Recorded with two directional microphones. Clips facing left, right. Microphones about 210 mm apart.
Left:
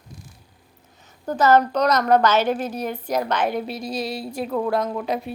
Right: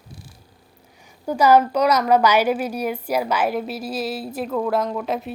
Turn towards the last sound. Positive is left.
turn(degrees=0)  # may be behind; listen again after turning